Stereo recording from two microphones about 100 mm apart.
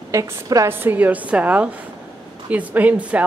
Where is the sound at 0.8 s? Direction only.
15° right (ahead or behind).